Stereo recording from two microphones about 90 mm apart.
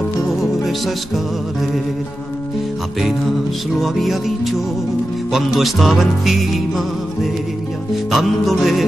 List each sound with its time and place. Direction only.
0.4 s music: centre (ahead or behind)
3.0 s music: centre (ahead or behind)
8.1 s music: centre (ahead or behind)